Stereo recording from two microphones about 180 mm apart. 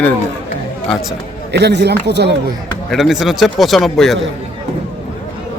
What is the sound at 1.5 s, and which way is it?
Speech, 70° right (ahead or behind).